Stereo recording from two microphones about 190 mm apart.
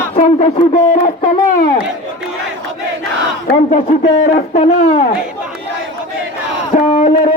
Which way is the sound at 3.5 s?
45° left (ahead or behind).